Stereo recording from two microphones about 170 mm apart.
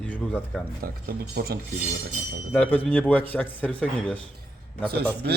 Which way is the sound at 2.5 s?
5° left (ahead or behind).